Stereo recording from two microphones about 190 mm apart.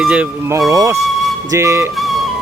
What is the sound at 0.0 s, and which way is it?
Speech, 5° right (ahead or behind).